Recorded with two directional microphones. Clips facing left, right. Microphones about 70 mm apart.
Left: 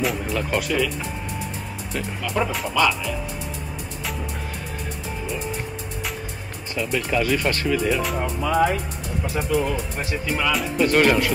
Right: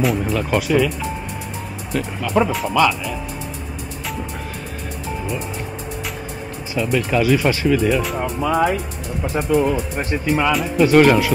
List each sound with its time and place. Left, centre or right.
0.0 s speech: centre
2.2 s speech: centre
2.5 s speech: centre
6.7 s speech: centre
8.4 s speech: centre
10.8 s speech: centre